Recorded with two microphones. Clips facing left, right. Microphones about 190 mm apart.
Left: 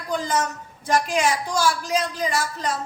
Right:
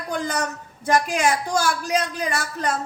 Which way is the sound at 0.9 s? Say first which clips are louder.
Right 1 dB; 55° right (ahead or behind).